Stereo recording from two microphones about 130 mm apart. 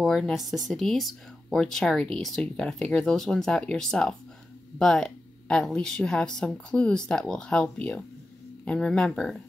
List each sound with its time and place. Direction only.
0.0 s speech: 5° left (ahead or behind)